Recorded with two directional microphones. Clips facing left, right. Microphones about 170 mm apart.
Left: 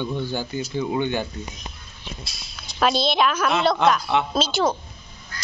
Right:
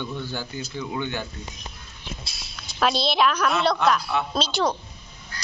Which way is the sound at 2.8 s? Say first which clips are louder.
Left 2 dB; centre (ahead or behind).